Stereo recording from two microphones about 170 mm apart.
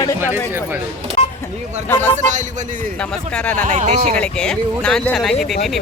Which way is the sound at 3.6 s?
50° right (ahead or behind).